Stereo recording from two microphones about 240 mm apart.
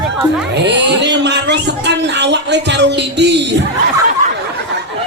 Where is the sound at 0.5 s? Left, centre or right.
Right.